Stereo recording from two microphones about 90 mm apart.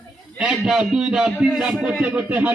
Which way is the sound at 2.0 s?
15° right (ahead or behind).